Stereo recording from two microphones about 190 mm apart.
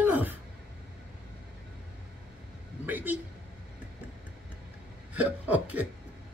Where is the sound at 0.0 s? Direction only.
10° right (ahead or behind).